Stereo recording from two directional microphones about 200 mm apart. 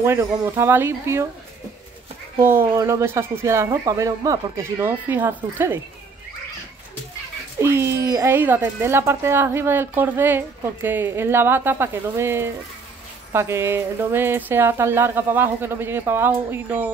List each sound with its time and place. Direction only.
0.0 s speech: 15° right (ahead or behind)
2.4 s speech: 10° right (ahead or behind)
7.6 s speech: 10° right (ahead or behind)